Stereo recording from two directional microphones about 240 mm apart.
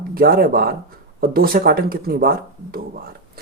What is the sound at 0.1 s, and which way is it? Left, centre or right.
Speech, right.